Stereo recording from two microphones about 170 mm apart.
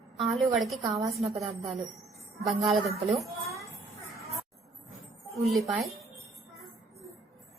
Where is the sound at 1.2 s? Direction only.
30° right (ahead or behind).